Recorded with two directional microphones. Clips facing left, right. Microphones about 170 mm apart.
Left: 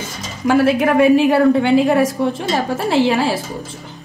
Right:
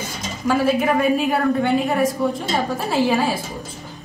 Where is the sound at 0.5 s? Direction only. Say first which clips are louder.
Left 4 dB; 80° left.